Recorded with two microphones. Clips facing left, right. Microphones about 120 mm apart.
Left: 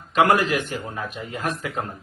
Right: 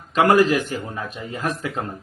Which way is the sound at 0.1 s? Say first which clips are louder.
Right 3 dB; 35° right (ahead or behind).